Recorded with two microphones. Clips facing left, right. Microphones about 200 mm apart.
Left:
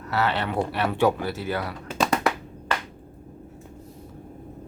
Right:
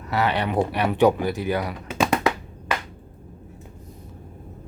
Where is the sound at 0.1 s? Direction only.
15° right (ahead or behind).